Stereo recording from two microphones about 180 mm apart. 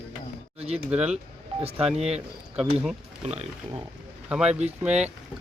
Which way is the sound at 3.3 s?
35° right (ahead or behind).